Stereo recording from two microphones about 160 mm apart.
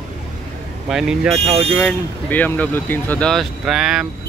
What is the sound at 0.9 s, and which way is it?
Speech, 5° right (ahead or behind).